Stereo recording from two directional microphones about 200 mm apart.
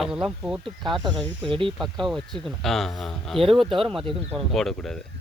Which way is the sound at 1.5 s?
25° right (ahead or behind).